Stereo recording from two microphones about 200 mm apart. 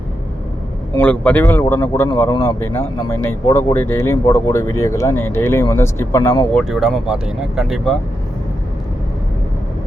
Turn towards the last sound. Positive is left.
turn(degrees=0)  # may be behind; listen again after turning